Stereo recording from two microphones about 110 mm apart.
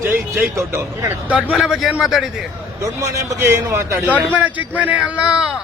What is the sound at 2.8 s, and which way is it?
Speech, 30° right (ahead or behind).